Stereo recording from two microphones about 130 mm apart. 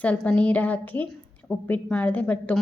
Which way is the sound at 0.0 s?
10° left (ahead or behind).